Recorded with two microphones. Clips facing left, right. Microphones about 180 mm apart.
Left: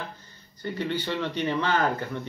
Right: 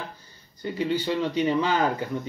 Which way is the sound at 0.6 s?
10° right (ahead or behind).